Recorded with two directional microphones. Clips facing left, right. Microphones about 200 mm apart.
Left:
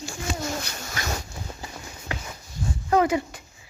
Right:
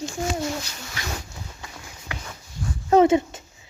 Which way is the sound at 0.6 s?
50° left (ahead or behind).